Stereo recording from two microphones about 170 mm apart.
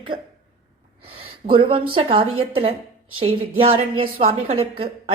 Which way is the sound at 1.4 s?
30° right (ahead or behind).